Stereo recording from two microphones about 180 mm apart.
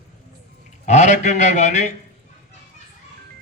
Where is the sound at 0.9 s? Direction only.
40° left (ahead or behind).